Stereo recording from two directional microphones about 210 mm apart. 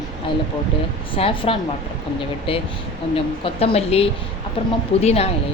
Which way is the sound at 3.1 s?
30° left (ahead or behind).